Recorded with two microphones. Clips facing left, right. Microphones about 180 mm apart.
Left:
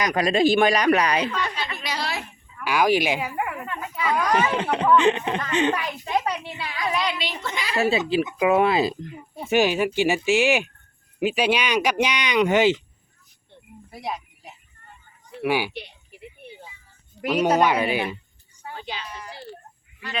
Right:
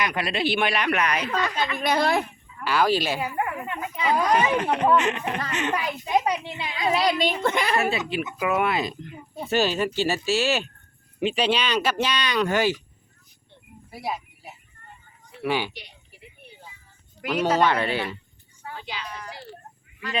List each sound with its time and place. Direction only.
0.0 s speech: 40° left (ahead or behind)
1.5 s a woman's voice: 55° right (ahead or behind)
2.6 s speech: 15° left (ahead or behind)
3.7 s speech: 20° right (ahead or behind)
4.9 s speech: 30° left (ahead or behind)
5.7 s a child's voice: 15° right (ahead or behind); by 7.8 s 55° right (ahead or behind)
7.8 s speech: 30° left (ahead or behind)
9.5 s speech: 15° left (ahead or behind)
13.9 s a sound: 5° right (ahead or behind)
15.4 s speech: 10° left (ahead or behind)
17.2 s speech: 15° left (ahead or behind)
18.6 s a sound: 25° left (ahead or behind)